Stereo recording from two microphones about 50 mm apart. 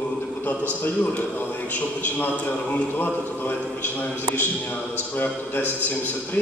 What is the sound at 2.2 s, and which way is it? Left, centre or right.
Speech, left.